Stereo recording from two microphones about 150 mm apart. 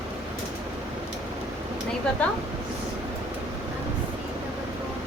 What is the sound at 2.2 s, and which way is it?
Speech, 10° left (ahead or behind).